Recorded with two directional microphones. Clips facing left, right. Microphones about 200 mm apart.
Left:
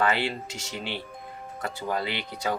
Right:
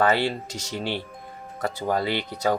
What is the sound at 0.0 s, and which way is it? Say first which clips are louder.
Speech: right 4 dB; 40° right (ahead or behind).